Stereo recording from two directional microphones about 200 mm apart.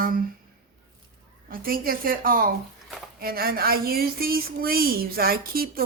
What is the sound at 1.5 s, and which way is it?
A woman's voice, 45° right (ahead or behind).